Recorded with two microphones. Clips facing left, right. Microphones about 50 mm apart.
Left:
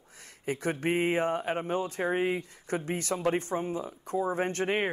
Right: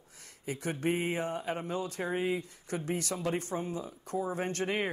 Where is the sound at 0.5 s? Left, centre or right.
Left.